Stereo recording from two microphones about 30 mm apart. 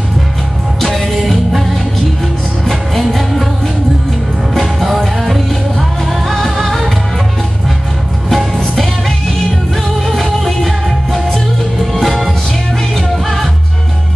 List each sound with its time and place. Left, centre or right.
0.9 s music: centre
2.6 s music: centre
4.6 s music: centre
10.0 s music: centre
11.8 s music: centre